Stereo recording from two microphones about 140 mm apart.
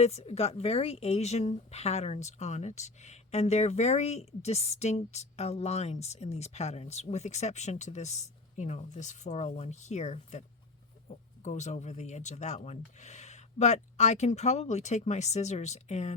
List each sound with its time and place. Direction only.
0.0 s speech: 50° left (ahead or behind)